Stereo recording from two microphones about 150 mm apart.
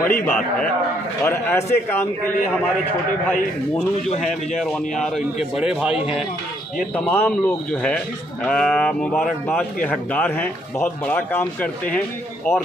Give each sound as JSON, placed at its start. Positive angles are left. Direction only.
{"t": 0.1, "sound": "speech", "side_deg": 15}
{"t": 4.6, "sound": "a man's voice", "side_deg": 0}
{"t": 6.8, "sound": "speech", "side_deg": 10}